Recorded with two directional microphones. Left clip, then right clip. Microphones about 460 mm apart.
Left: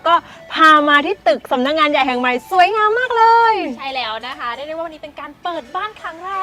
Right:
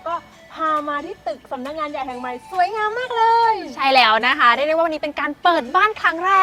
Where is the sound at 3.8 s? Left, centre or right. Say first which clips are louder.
Right 9 dB; right.